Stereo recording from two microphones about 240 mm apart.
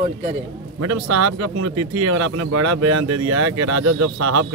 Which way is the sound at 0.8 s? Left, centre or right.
Right.